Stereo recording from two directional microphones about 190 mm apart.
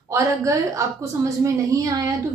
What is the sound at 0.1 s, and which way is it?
A woman's voice, 15° right (ahead or behind).